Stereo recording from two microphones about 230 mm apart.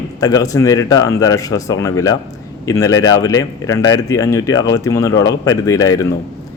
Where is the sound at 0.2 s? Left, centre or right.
Centre.